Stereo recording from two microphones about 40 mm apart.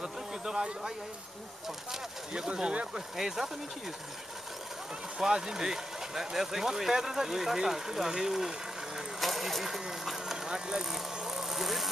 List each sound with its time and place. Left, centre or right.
0.0 s a sound: centre
2.3 s speech: right
2.9 s speech: centre
5.2 s speech: centre
9.2 s speech: centre
10.3 s vehicle: centre